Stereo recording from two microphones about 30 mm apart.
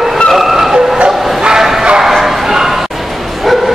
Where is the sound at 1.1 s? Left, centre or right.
Centre.